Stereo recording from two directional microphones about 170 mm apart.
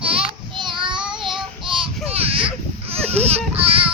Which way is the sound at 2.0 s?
35° right (ahead or behind).